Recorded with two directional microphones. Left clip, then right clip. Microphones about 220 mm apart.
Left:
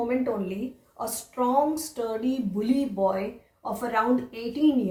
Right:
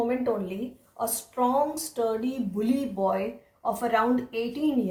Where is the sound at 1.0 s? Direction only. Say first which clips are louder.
Right 2 dB; 40° right (ahead or behind).